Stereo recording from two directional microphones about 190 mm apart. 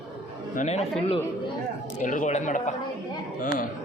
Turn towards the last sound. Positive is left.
turn(degrees=45)  # may be behind; listen again after turning